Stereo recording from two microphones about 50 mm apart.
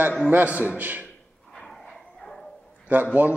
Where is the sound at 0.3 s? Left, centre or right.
Right.